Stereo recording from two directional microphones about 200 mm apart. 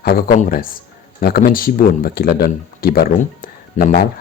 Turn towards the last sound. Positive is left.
turn(degrees=45)  # may be behind; listen again after turning